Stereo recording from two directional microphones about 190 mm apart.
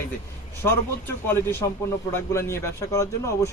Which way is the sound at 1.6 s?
20° left (ahead or behind).